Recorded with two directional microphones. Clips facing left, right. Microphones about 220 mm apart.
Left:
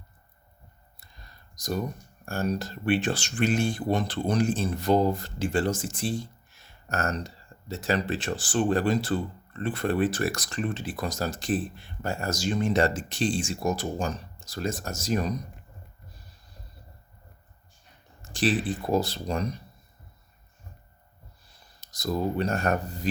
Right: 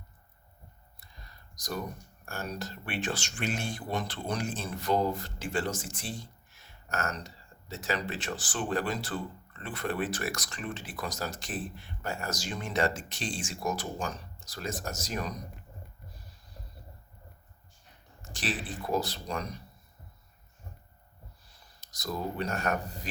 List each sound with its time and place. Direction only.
1.5 s speech: 25° left (ahead or behind)
18.2 s speech: 30° left (ahead or behind)
21.8 s speech: 30° left (ahead or behind)